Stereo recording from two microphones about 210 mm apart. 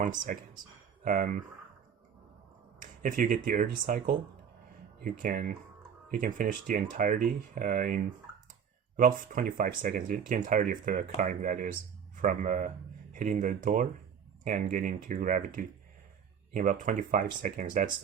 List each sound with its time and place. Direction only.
0.0 s speech: 40° right (ahead or behind)
2.8 s speech: 40° right (ahead or behind)
9.0 s speech: 40° right (ahead or behind)